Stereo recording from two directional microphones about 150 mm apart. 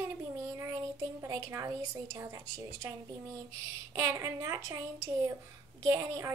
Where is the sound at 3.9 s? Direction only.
20° right (ahead or behind).